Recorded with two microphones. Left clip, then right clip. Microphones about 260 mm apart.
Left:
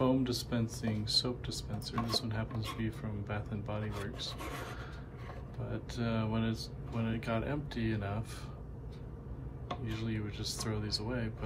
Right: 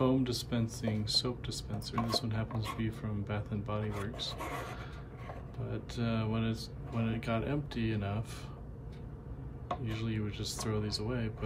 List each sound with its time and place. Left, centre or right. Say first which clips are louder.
0.0 s speech: even; centre
9.7 s speech: right 2 dB; centre